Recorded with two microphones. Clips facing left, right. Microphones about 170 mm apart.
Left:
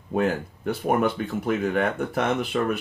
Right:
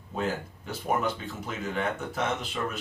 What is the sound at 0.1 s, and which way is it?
Speech, 60° left (ahead or behind).